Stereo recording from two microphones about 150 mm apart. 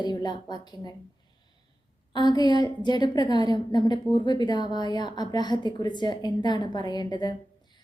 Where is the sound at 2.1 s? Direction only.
30° left (ahead or behind).